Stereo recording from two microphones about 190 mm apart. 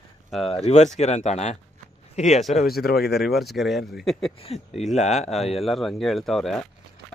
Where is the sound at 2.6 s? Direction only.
55° left (ahead or behind).